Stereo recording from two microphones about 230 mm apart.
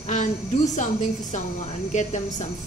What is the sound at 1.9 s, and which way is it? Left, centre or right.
Speech, left.